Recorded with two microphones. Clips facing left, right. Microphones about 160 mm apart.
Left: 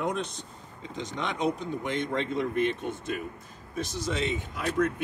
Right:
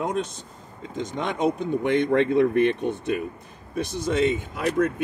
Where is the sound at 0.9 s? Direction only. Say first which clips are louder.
Right 5 dB; 50° right (ahead or behind).